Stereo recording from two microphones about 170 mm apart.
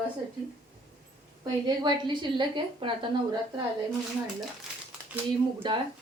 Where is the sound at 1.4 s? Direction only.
25° right (ahead or behind).